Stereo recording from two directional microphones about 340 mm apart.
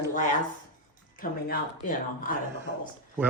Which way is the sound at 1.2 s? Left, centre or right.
Left.